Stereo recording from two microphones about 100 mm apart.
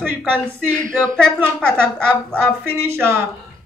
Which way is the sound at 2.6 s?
25° right (ahead or behind).